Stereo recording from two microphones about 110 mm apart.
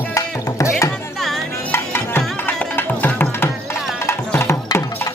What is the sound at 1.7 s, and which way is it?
Music, 20° left (ahead or behind).